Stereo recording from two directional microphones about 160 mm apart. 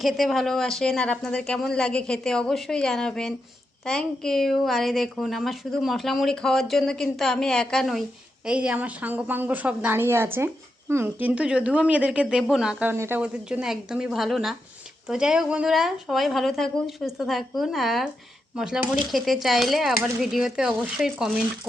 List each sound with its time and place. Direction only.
0.0 s a woman's voice: centre (ahead or behind)